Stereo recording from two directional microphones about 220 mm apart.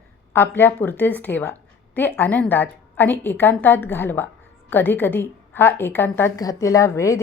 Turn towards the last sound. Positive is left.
turn(degrees=15)  # may be behind; listen again after turning